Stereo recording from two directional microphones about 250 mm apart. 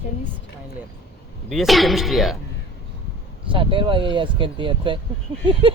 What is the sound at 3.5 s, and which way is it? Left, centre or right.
Speech, right.